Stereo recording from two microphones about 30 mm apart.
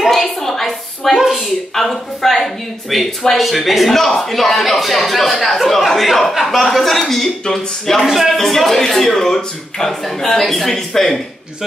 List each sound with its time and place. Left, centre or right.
0.1 s a sound: centre
1.1 s speech: centre
1.8 s a man's voice: centre
3.9 s a man's voice: centre
8.0 s a man's voice: centre